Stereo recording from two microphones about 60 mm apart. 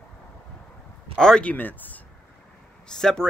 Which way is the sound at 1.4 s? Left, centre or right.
Left.